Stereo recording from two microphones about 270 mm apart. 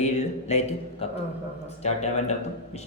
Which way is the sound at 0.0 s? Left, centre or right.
Left.